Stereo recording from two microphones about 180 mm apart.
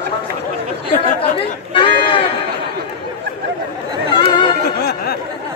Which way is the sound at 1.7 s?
30° left (ahead or behind).